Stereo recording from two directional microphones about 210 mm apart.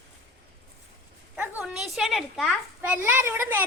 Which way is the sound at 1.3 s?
10° right (ahead or behind).